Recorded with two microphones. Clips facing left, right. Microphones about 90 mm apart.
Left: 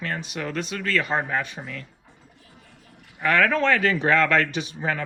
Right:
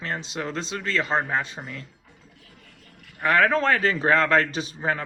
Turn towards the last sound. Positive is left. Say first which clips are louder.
# even
turn(degrees=-35)  # may be behind; listen again after turning